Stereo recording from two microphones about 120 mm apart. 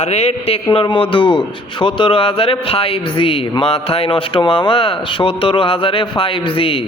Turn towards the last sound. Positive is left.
turn(degrees=50)  # may be behind; listen again after turning